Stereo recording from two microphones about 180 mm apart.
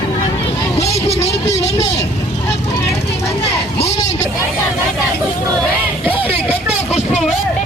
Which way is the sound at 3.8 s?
35° left (ahead or behind).